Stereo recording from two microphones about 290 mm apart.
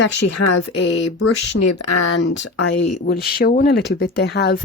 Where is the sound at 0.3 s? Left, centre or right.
Left.